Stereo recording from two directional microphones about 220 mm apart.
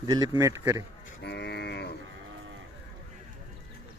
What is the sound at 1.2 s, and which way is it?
Cattle, 50° left (ahead or behind).